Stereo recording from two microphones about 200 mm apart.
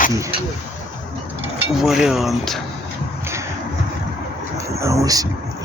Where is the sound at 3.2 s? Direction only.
15° right (ahead or behind).